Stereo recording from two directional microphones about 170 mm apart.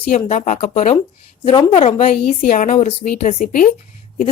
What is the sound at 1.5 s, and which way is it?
A woman's voice, 30° left (ahead or behind).